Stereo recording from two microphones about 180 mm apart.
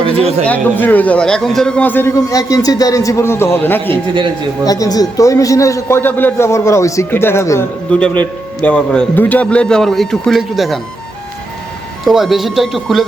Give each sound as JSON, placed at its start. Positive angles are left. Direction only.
{"t": 0.0, "sound": "speech", "side_deg": -35}
{"t": 0.4, "sound": "a man's voice", "side_deg": 10}
{"t": 12.0, "sound": "a man's voice", "side_deg": 0}